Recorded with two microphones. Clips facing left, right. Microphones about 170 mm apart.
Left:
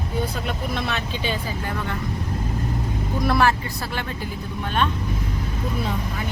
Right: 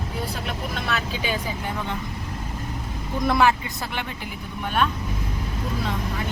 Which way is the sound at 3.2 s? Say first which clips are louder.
Even; 20° right (ahead or behind).